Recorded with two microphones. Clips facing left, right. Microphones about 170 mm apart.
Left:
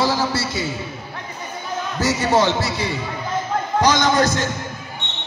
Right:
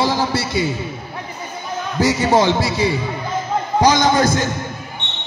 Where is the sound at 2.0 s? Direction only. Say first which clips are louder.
Right 3 dB; 15° right (ahead or behind).